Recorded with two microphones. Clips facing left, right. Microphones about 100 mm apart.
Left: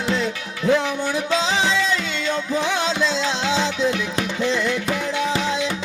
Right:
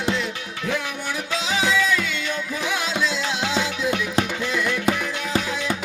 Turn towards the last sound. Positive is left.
turn(degrees=30)  # may be behind; listen again after turning